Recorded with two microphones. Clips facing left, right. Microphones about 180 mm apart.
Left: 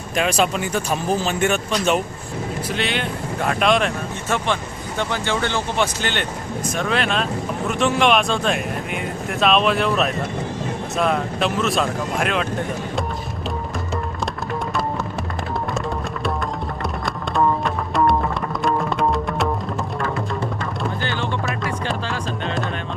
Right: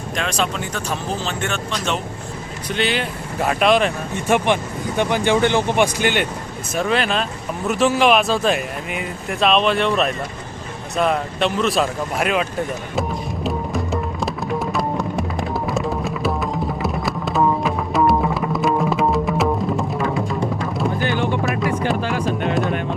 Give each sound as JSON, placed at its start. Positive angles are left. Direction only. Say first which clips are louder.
{"t": 0.2, "sound": "speech", "louder": "left 4 dB", "side_deg": 5}
{"t": 4.3, "sound": "speech", "louder": "right 5 dB", "side_deg": -15}
{"t": 6.7, "sound": "speech", "louder": "right 3 dB", "side_deg": 0}
{"t": 13.0, "sound": "music", "louder": "right 3 dB", "side_deg": 0}
{"t": 16.8, "sound": "music", "louder": "right 3 dB", "side_deg": 0}
{"t": 21.0, "sound": "music", "louder": "right 5 dB", "side_deg": -15}
{"t": 21.4, "sound": "music", "louder": "right 5 dB", "side_deg": 0}
{"t": 21.8, "sound": "music", "louder": "right 5 dB", "side_deg": -15}